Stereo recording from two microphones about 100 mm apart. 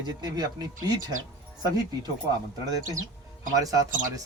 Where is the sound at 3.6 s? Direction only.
35° right (ahead or behind).